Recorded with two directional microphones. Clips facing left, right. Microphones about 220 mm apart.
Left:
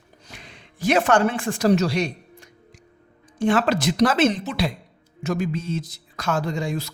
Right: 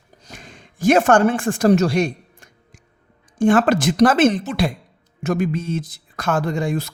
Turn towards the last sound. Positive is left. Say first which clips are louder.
# right 4 dB
turn(degrees=-55)  # may be behind; listen again after turning